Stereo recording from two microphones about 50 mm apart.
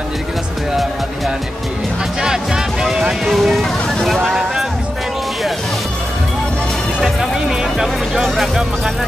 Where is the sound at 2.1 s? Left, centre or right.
Centre.